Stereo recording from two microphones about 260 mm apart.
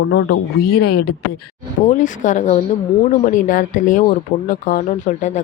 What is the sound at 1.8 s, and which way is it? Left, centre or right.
Speech, left.